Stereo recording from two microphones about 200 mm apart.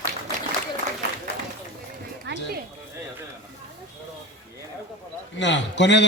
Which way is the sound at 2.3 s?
60° right (ahead or behind).